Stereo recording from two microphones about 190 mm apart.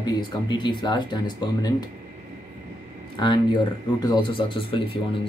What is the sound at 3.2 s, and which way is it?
Speech, 20° left (ahead or behind).